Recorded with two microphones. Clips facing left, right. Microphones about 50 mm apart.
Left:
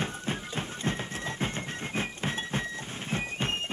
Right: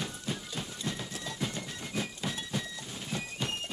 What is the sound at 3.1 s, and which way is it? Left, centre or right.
Music, left.